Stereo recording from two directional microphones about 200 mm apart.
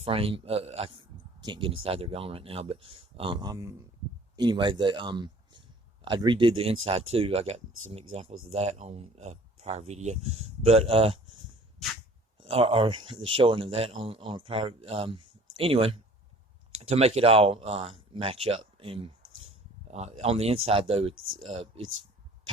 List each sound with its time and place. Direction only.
0.0 s speech: 30° right (ahead or behind)
12.4 s speech: 30° right (ahead or behind)